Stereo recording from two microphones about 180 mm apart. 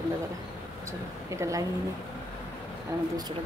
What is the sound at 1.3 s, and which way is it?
Speech, 15° right (ahead or behind).